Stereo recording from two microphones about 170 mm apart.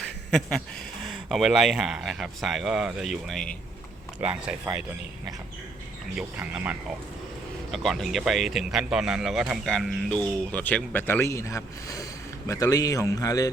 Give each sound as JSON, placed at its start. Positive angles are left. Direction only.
{"t": 0.0, "sound": "a sound", "side_deg": 5}
{"t": 1.0, "sound": "speech", "side_deg": 0}
{"t": 4.2, "sound": "speech", "side_deg": -10}
{"t": 6.1, "sound": "speech", "side_deg": -5}